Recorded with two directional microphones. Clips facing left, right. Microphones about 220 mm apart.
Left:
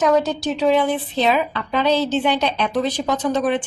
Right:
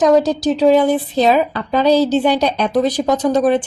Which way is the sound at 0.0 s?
35° right (ahead or behind).